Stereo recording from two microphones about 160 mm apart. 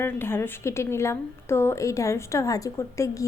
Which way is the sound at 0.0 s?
15° left (ahead or behind).